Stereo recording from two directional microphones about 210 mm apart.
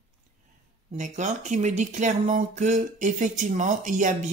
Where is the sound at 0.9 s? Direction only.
35° right (ahead or behind).